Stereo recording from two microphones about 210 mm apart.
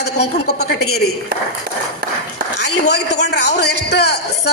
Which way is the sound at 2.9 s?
55° left (ahead or behind).